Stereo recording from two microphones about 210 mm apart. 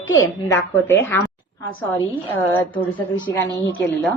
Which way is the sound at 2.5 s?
10° left (ahead or behind).